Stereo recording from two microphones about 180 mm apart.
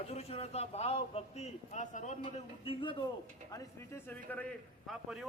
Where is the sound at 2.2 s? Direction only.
30° left (ahead or behind).